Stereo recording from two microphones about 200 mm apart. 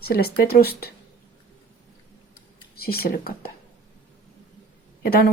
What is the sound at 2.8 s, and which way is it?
Speech, 50° left (ahead or behind).